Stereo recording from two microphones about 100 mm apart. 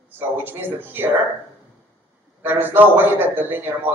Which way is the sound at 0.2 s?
20° right (ahead or behind).